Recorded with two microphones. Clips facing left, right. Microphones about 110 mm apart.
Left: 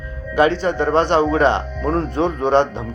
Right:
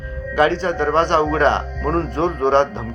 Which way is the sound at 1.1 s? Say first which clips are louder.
Left 1 dB; 15° left (ahead or behind).